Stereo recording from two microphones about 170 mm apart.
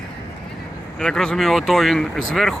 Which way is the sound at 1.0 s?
5° left (ahead or behind).